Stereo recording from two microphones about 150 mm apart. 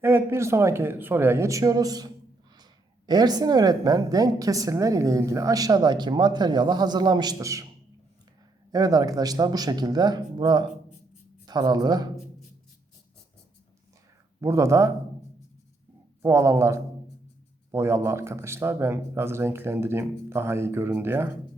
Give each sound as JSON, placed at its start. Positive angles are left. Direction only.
{"t": 0.0, "sound": "a woman's voice", "side_deg": -15}
{"t": 8.7, "sound": "a woman's voice", "side_deg": -25}
{"t": 14.4, "sound": "a woman's voice", "side_deg": -20}
{"t": 16.2, "sound": "a woman's voice", "side_deg": -20}